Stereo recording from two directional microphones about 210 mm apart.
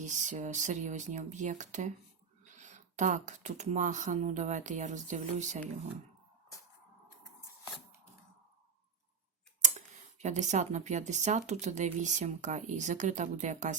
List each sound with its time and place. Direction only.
0.0 s speech: 35° right (ahead or behind)
9.6 s speech: 35° right (ahead or behind)